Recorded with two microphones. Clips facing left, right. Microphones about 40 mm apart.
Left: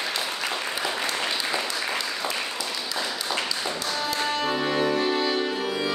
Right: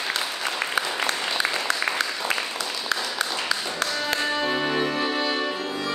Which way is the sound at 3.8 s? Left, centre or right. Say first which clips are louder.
Right 3 dB; centre.